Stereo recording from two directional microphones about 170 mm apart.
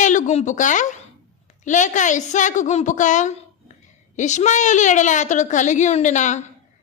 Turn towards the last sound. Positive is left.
turn(degrees=45)  # may be behind; listen again after turning